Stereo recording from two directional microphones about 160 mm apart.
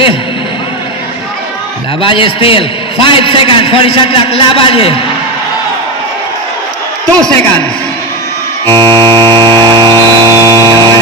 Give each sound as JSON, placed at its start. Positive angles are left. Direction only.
{"t": 2.0, "sound": "a man's voice", "side_deg": 35}
{"t": 7.2, "sound": "a man's voice", "side_deg": 5}
{"t": 8.6, "sound": "buzzer", "side_deg": -25}